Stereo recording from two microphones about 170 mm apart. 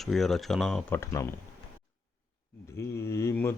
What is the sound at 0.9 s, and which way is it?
Speech, 15° left (ahead or behind).